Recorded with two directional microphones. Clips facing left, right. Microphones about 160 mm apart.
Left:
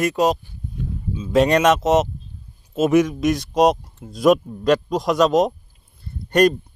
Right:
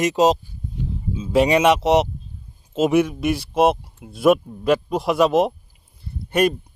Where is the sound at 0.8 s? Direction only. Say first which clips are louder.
Right 1 dB; 20° right (ahead or behind).